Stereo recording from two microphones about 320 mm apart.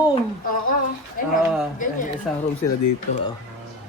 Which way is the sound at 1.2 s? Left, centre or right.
Left.